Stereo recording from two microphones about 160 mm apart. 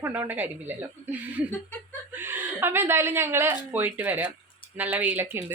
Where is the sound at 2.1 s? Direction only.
15° right (ahead or behind).